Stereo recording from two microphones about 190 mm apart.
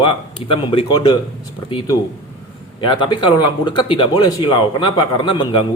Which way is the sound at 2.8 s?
25° left (ahead or behind).